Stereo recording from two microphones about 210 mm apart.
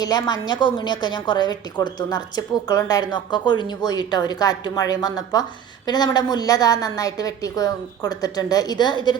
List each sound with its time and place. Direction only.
0.0 s a woman's voice: 20° left (ahead or behind)